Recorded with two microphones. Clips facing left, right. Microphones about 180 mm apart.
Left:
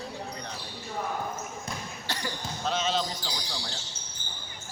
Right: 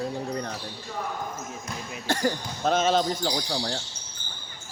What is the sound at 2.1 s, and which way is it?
Speech, 50° right (ahead or behind).